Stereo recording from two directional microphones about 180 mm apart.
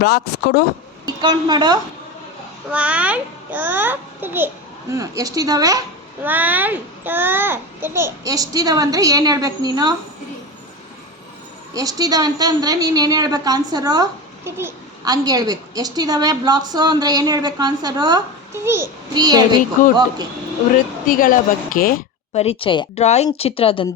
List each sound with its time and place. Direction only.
0.0 s speech: 65° left (ahead or behind)
1.0 s speech: 20° right (ahead or behind)
2.6 s a child's voice: 5° right (ahead or behind)
6.2 s a woman's voice: 10° right (ahead or behind)
11.7 s a woman's voice: 20° right (ahead or behind)
19.8 s a woman's voice: 50° left (ahead or behind)
21.1 s a woman's voice: 50° left (ahead or behind)
22.3 s speech: 35° left (ahead or behind)